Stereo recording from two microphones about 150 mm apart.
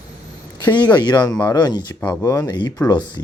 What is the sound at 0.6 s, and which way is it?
Speech, 30° left (ahead or behind).